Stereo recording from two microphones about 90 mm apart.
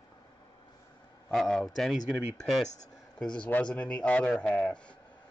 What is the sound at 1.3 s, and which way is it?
A man's voice, centre (ahead or behind).